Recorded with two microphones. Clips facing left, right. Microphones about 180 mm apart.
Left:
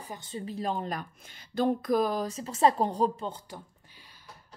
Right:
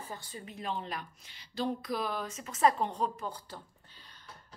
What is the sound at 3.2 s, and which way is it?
Speech, 15° left (ahead or behind).